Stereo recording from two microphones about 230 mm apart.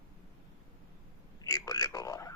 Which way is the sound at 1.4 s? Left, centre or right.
Centre.